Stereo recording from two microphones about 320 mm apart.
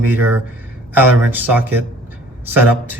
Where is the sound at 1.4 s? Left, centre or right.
Centre.